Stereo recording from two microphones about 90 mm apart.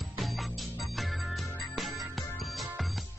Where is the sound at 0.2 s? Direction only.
Centre (ahead or behind).